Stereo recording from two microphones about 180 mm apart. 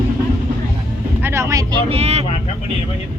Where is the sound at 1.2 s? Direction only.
15° right (ahead or behind); by 2.3 s 35° right (ahead or behind).